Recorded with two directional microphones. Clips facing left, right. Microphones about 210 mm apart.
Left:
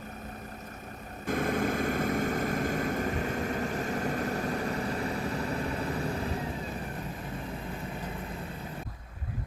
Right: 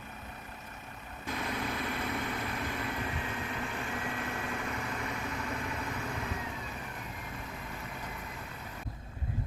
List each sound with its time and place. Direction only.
1.3 s vehicle: 50° left (ahead or behind); by 6.5 s 35° left (ahead or behind)